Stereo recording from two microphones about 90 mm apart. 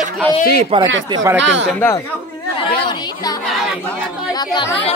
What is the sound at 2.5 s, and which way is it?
Speech, 60° left (ahead or behind).